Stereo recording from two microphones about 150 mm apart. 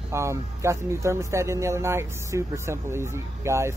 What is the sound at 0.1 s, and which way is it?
Speech, 20° right (ahead or behind).